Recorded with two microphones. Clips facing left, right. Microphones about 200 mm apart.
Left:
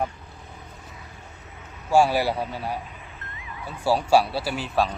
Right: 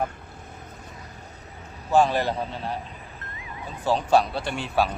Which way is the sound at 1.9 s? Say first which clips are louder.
Left 1 dB; 10° left (ahead or behind).